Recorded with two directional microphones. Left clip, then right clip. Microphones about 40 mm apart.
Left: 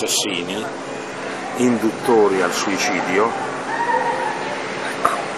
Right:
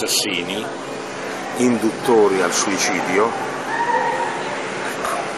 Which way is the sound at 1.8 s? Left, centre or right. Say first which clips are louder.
Even; centre.